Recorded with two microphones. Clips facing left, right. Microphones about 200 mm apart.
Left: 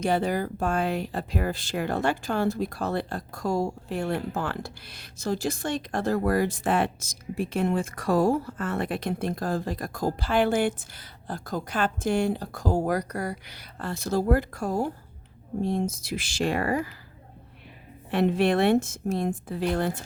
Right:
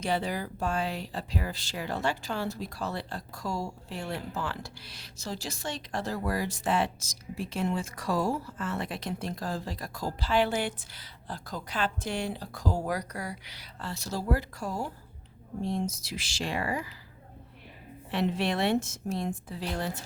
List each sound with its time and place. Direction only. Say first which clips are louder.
0.0 s speech: left 6 dB; 50° left (ahead or behind)
18.1 s speech: left 6 dB; 55° left (ahead or behind)